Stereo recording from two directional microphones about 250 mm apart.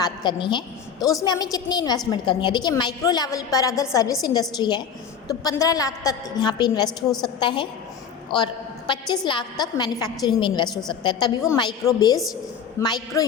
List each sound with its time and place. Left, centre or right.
0.0 s a woman's voice: centre